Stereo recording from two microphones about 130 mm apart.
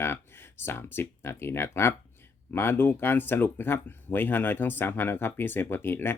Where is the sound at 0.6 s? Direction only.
15° left (ahead or behind).